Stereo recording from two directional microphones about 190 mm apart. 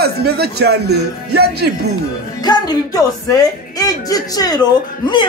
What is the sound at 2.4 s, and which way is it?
Speech, 20° left (ahead or behind).